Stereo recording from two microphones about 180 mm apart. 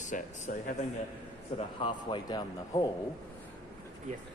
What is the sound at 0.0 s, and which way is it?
Speech, 45° left (ahead or behind).